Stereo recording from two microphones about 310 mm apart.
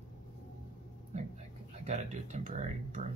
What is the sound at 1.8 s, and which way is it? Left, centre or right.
Speech, right.